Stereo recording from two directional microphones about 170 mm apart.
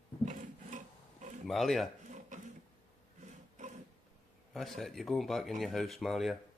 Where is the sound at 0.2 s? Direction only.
50° right (ahead or behind).